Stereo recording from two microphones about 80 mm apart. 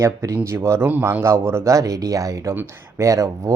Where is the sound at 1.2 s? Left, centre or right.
Right.